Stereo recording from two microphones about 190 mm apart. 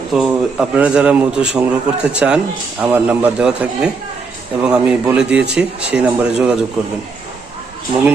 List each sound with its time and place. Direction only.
0.1 s a man's voice: 5° right (ahead or behind)
7.9 s speech: 25° right (ahead or behind)